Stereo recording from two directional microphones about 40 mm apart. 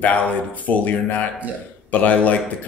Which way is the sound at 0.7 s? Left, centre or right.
Left.